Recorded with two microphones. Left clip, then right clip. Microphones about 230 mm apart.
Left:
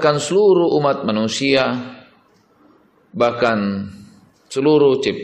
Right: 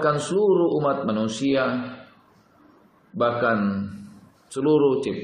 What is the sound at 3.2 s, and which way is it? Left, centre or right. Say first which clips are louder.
A man's voice: left 5 dB; left.